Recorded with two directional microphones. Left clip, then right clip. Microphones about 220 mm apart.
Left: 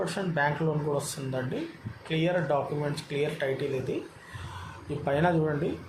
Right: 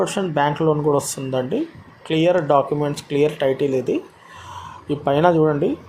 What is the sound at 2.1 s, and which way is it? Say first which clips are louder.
A man's voice: right 11 dB; 30° right (ahead or behind).